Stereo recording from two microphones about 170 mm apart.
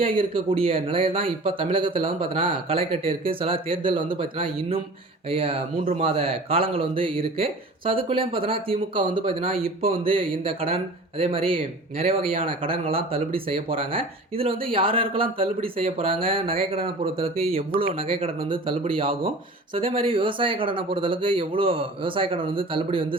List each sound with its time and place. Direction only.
0.0 s speech: 30° right (ahead or behind)